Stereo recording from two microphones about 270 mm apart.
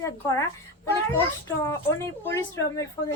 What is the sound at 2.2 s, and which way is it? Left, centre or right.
Speech, centre.